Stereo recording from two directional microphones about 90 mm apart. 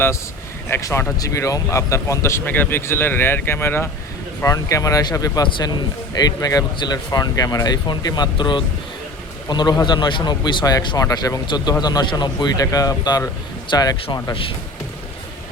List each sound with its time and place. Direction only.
0.8 s speech: 35° left (ahead or behind)
2.4 s speech: 20° left (ahead or behind)
4.4 s a man's voice: 40° left (ahead or behind)
10.8 s speech: 40° left (ahead or behind)